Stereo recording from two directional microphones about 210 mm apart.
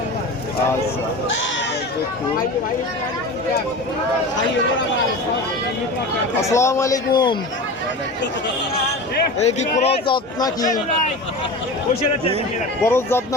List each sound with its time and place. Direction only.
6.4 s a man's voice: 15° left (ahead or behind)
9.4 s speech: 30° left (ahead or behind)
10.4 s a man's voice: 20° left (ahead or behind)
12.8 s a man's voice: 10° left (ahead or behind)